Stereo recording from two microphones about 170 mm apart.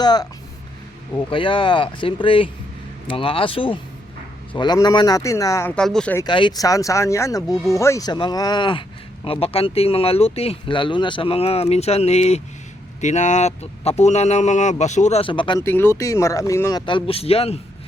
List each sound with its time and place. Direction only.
0.0 s speech: 25° left (ahead or behind)
1.3 s speech: 30° left (ahead or behind)
5.7 s speech: 5° left (ahead or behind)
6.1 s speech: 25° left (ahead or behind)
15.6 s speech: 15° left (ahead or behind)
16.8 s speech: 30° left (ahead or behind)